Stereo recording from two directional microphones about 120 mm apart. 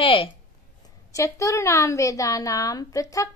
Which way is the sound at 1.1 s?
25° left (ahead or behind).